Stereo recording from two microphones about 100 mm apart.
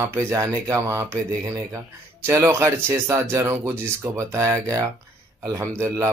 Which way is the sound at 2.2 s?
25° right (ahead or behind).